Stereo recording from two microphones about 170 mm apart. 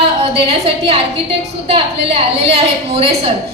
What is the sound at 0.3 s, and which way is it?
A woman's voice, 35° right (ahead or behind).